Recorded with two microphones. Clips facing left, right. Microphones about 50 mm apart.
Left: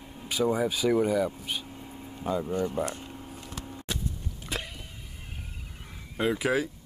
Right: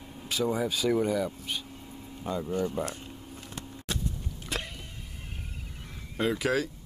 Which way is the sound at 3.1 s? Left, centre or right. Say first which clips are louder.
Left 2 dB; centre.